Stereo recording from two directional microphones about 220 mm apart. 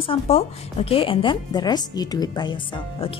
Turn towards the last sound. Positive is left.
turn(degrees=25)  # may be behind; listen again after turning